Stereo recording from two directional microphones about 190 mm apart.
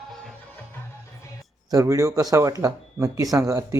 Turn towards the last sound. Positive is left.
turn(degrees=-15)  # may be behind; listen again after turning